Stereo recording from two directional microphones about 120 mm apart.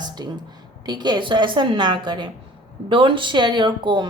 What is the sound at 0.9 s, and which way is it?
A woman's voice, 35° right (ahead or behind).